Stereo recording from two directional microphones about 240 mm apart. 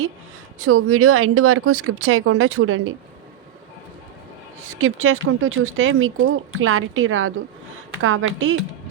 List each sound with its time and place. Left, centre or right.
0.6 s speech: right
4.6 s speech: right